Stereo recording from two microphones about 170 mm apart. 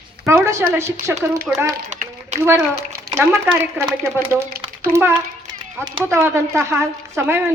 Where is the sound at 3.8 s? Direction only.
10° right (ahead or behind).